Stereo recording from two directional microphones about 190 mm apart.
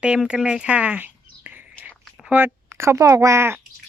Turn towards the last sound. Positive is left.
turn(degrees=-15)  # may be behind; listen again after turning